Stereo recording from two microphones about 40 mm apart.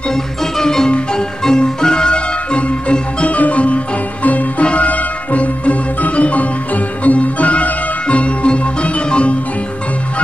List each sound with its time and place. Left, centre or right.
0.1 s music: centre; by 9.4 s left